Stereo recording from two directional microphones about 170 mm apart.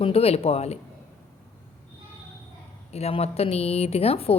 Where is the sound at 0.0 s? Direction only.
35° left (ahead or behind).